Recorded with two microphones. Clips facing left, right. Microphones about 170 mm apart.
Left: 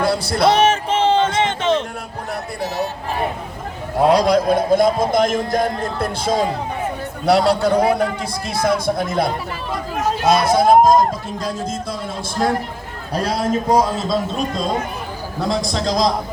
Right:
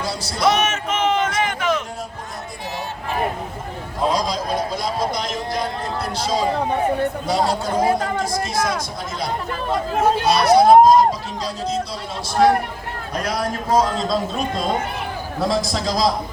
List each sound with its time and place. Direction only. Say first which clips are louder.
0.0 s music: left 8 dB; 60° left (ahead or behind)
0.4 s a sound: left 4 dB; 30° left (ahead or behind)
4.0 s a man's voice: left 7 dB; 65° left (ahead or behind)
7.3 s a man's voice: left 10 dB; 70° left (ahead or behind); by 11.9 s 50° left (ahead or behind)
13.1 s a man's voice: left 5 dB; 30° left (ahead or behind); by 13.9 s 15° left (ahead or behind)
14.1 s a man's voice: left 1 dB; centre (ahead or behind)